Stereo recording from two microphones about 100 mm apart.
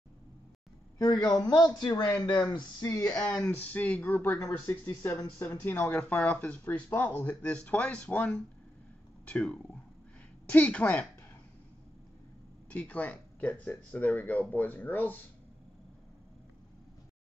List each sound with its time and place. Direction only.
0.9 s a woman's voice: 40° left (ahead or behind)
3.3 s speech: 15° left (ahead or behind)
12.6 s speech: 15° left (ahead or behind)